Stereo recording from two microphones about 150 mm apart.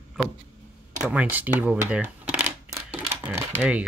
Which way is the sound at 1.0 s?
10° right (ahead or behind).